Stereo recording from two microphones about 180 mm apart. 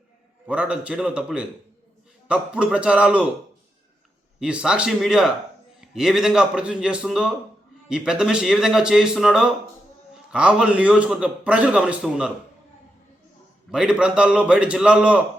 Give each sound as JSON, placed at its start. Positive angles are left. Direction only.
{"t": 0.4, "sound": "a man's voice", "side_deg": -5}
{"t": 4.4, "sound": "a man's voice", "side_deg": -5}
{"t": 13.7, "sound": "a man's voice", "side_deg": -5}